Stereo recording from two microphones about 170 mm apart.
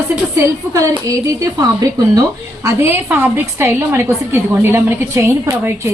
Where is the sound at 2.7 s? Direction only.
15° right (ahead or behind).